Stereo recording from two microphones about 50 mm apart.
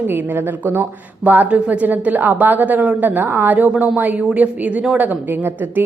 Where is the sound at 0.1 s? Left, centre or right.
Right.